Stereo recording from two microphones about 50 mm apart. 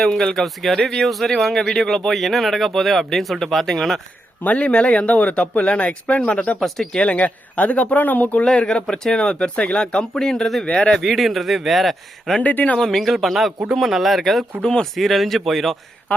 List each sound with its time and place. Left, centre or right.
0.0 s speech: centre
4.4 s speech: left
6.6 s speech: centre
7.0 s speech: left
8.4 s speech: centre
11.0 s speech: centre
12.4 s speech: left
12.7 s speech: centre
14.6 s speech: centre
14.9 s speech: centre